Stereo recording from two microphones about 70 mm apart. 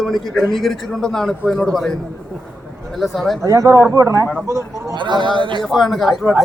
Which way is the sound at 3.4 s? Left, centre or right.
Right.